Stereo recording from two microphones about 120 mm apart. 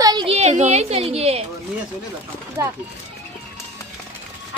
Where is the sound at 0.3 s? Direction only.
70° right (ahead or behind).